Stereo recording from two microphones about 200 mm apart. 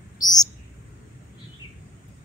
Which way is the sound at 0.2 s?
20° left (ahead or behind).